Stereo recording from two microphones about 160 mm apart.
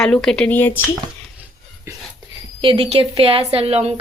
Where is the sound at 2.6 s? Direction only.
35° right (ahead or behind).